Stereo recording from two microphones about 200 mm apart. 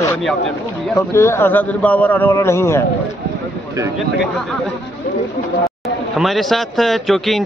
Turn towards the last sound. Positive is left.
turn(degrees=0)  # may be behind; listen again after turning